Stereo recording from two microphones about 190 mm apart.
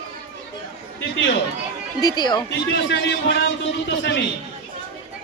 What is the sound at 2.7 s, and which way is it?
A man's voice, 75° left (ahead or behind).